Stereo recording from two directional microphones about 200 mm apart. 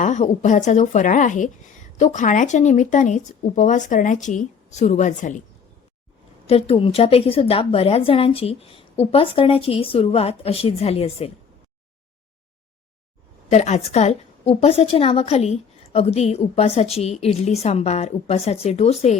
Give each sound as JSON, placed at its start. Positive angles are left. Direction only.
{"t": 0.0, "sound": "a woman's voice", "side_deg": 35}
{"t": 6.5, "sound": "a woman's voice", "side_deg": 30}
{"t": 13.5, "sound": "a woman's voice", "side_deg": 35}